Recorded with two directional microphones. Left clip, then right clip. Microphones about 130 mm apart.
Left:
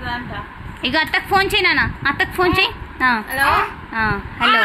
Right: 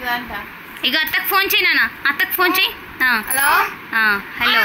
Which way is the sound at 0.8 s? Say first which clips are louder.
Even; 35° left (ahead or behind).